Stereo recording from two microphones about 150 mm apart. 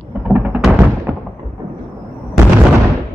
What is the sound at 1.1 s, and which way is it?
Fireworks, 10° right (ahead or behind).